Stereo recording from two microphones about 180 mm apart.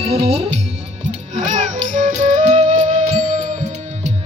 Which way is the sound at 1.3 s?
40° right (ahead or behind).